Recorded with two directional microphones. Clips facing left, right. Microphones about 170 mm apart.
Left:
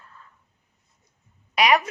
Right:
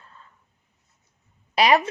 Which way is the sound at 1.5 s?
30° right (ahead or behind).